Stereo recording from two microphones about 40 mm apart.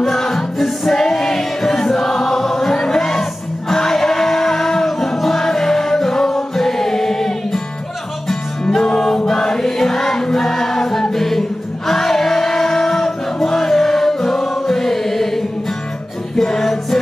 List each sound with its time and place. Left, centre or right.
0.0 s music: centre
8.7 s music: centre